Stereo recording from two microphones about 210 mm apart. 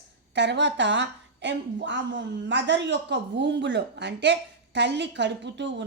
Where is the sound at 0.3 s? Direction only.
55° right (ahead or behind).